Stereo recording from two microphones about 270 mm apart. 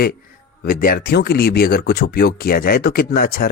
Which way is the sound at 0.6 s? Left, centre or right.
Left.